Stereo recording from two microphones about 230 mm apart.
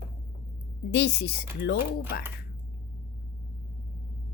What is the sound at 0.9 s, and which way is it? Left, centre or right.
Speech, left.